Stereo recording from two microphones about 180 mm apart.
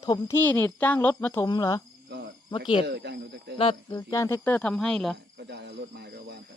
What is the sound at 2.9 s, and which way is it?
Speech, 70° right (ahead or behind).